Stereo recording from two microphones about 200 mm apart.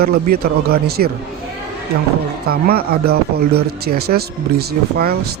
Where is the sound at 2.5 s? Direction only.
50° right (ahead or behind).